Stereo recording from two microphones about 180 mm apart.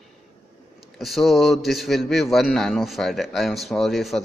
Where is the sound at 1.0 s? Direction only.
Centre (ahead or behind).